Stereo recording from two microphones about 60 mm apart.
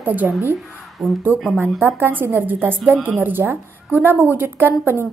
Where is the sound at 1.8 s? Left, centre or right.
Right.